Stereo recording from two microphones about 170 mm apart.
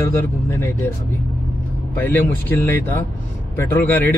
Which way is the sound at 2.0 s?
10° left (ahead or behind).